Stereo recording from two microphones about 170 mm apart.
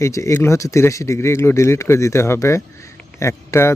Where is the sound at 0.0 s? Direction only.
15° left (ahead or behind).